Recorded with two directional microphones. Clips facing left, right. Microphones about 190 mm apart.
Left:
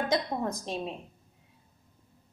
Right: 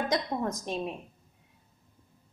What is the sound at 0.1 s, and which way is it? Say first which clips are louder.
Speech: even; 30° left (ahead or behind).